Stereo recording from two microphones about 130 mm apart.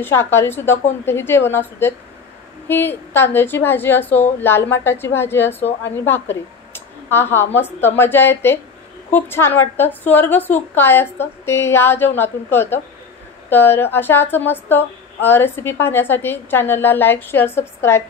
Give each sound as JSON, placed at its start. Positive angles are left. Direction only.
{"t": 0.0, "sound": "a woman's voice", "side_deg": 15}